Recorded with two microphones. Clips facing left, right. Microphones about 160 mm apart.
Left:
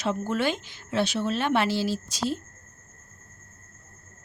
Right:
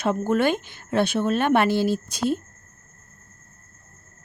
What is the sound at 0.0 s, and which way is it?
Speech, 55° right (ahead or behind).